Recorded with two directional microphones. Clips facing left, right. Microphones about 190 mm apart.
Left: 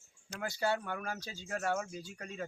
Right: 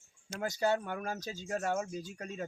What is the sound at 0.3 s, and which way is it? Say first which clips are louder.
Speech: right 3 dB; 30° right (ahead or behind).